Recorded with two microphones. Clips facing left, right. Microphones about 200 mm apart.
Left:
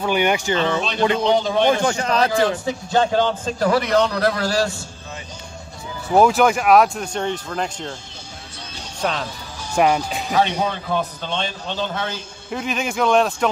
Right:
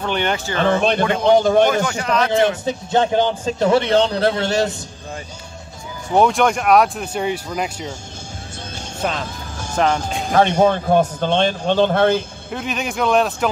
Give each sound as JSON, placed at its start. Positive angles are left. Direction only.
{"t": 0.0, "sound": "speech", "side_deg": 10}
{"t": 0.6, "sound": "speech", "side_deg": -50}
{"t": 1.8, "sound": "speech", "side_deg": 35}
{"t": 2.6, "sound": "a man's voice", "side_deg": -20}
{"t": 6.0, "sound": "speech", "side_deg": 5}
{"t": 9.0, "sound": "speech", "side_deg": -5}
{"t": 9.8, "sound": "speech", "side_deg": 10}
{"t": 10.2, "sound": "speech", "side_deg": -50}
{"t": 12.4, "sound": "speech", "side_deg": 0}